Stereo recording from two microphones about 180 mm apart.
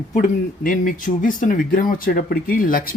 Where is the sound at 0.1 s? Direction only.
45° left (ahead or behind).